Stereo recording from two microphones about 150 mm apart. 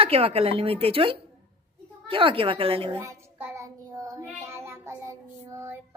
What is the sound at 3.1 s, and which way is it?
Child singing, 15° right (ahead or behind).